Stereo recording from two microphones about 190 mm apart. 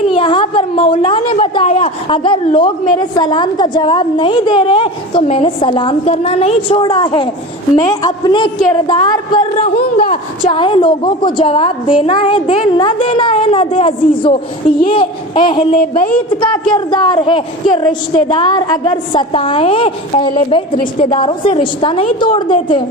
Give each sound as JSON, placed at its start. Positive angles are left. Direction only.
{"t": 0.1, "sound": "a woman's voice", "side_deg": 25}